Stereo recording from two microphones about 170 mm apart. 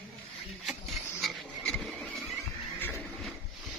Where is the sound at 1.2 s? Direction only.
Centre (ahead or behind).